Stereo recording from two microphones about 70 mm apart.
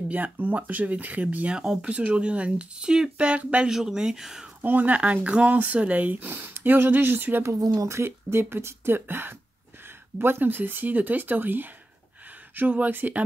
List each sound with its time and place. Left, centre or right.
0.1 s speech: right; by 4.5 s centre
4.6 s speech: right
7.6 s speech: right
8.0 s speech: right